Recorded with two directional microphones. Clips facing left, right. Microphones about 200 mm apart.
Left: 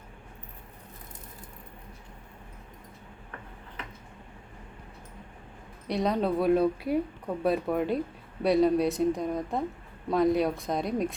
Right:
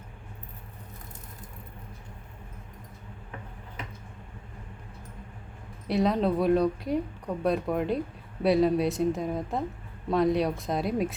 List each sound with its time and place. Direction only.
5.9 s speech: centre (ahead or behind)